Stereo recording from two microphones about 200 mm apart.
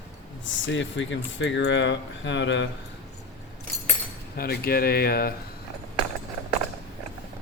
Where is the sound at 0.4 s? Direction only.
70° left (ahead or behind).